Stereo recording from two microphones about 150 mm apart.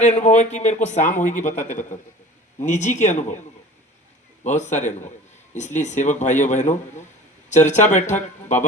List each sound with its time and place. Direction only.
0.0 s speech: 50° left (ahead or behind)
4.4 s speech: 50° left (ahead or behind)